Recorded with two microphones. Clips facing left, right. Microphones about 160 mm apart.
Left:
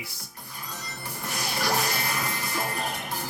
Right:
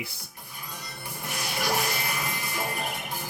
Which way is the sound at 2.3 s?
15° right (ahead or behind).